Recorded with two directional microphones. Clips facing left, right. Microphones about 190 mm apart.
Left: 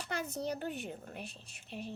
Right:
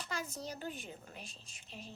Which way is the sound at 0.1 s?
60° left (ahead or behind).